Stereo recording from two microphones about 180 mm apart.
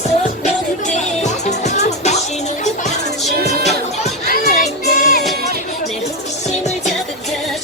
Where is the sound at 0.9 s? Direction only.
40° left (ahead or behind).